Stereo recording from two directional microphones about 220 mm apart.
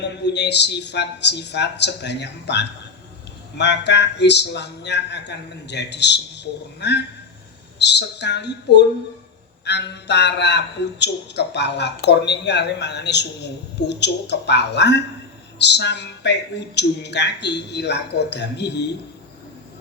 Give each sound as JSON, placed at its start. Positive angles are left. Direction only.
{"t": 0.0, "sound": "speech", "side_deg": 50}